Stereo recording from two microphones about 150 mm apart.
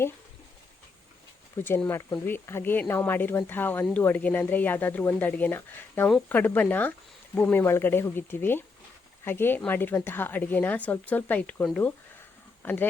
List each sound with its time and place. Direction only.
1.5 s speech: 15° left (ahead or behind)